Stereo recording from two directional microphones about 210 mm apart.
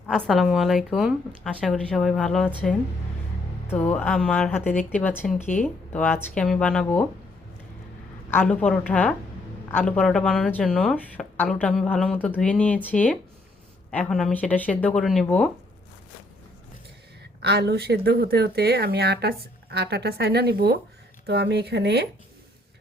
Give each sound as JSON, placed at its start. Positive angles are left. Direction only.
{"t": 0.1, "sound": "speech", "side_deg": 0}
{"t": 3.7, "sound": "speech", "side_deg": 5}
{"t": 8.3, "sound": "speech", "side_deg": 10}
{"t": 17.4, "sound": "speech", "side_deg": -50}